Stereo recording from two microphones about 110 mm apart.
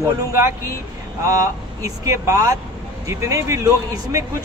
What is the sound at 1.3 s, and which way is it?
Speech, 30° right (ahead or behind).